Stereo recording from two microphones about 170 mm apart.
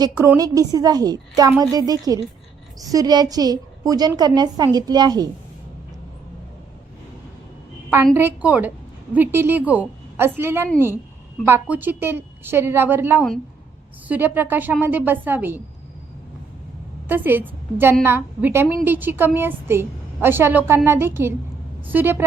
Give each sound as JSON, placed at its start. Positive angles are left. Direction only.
{"t": 0.0, "sound": "a woman's voice", "side_deg": -20}
{"t": 8.1, "sound": "a woman's voice", "side_deg": -10}
{"t": 17.1, "sound": "a woman's voice", "side_deg": -10}